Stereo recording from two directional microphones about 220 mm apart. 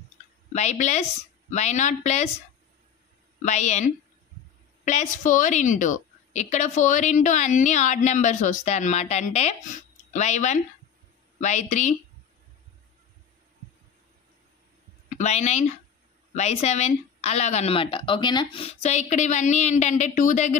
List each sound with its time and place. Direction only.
0.5 s a woman's voice: 30° left (ahead or behind)
3.4 s a woman's voice: 30° left (ahead or behind)
15.0 s a woman's voice: 30° left (ahead or behind)